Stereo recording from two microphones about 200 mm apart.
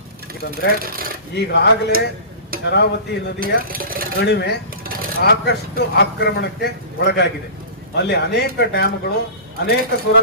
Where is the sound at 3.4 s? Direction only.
45° right (ahead or behind).